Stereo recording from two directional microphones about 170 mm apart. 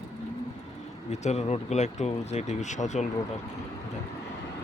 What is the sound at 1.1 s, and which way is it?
Speech, 40° left (ahead or behind).